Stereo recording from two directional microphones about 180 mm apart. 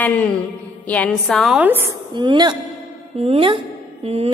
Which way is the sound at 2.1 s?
25° right (ahead or behind).